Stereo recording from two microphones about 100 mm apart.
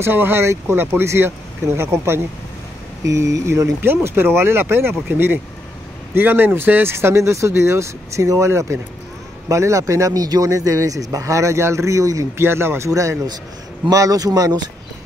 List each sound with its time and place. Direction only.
0.0 s speech: 20° right (ahead or behind); by 14.6 s 40° right (ahead or behind)